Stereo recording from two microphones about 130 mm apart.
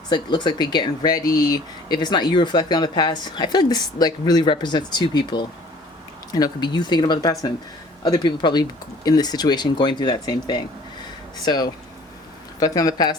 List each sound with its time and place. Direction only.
0.1 s speech: 35° left (ahead or behind)